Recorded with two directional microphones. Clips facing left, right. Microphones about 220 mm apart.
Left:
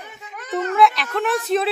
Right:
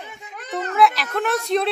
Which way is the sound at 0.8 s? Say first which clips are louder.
Even; centre (ahead or behind).